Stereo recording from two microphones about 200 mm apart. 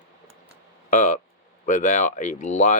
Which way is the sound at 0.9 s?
40° left (ahead or behind).